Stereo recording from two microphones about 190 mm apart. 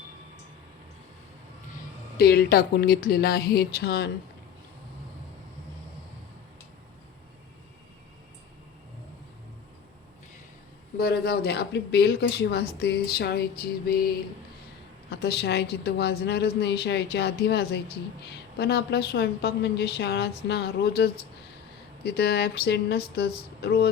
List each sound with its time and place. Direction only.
2.1 s speech: 55° left (ahead or behind)
10.9 s speech: 55° left (ahead or behind)
15.1 s speech: 60° left (ahead or behind)